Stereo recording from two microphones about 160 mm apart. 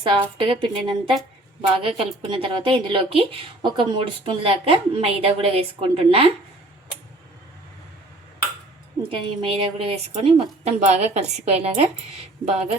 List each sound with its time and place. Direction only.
0.0 s a woman's voice: 35° right (ahead or behind)
9.0 s a woman's voice: 35° right (ahead or behind)